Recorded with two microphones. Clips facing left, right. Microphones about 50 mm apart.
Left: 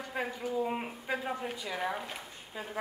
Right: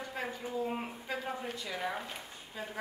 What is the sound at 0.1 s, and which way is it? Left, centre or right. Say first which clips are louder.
A woman's voice: left 5 dB; centre.